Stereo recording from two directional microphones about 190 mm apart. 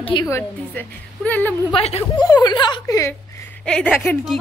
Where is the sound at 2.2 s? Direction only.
20° left (ahead or behind).